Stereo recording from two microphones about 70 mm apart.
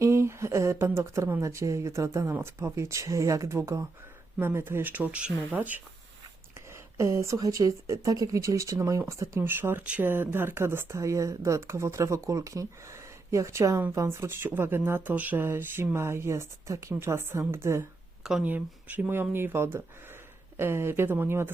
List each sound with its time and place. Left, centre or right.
0.0 s a sound: right
1.4 s speech: right
6.9 s speech: right
7.3 s speech: right
9.4 s speech: right
18.2 s a sound: centre
18.4 s speech: right